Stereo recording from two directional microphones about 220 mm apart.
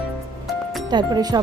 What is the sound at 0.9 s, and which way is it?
Speech, 20° right (ahead or behind).